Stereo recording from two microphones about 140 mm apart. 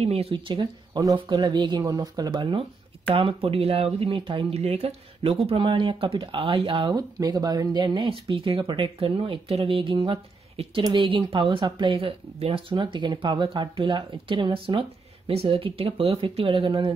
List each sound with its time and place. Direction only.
0.0 s speech: 45° right (ahead or behind)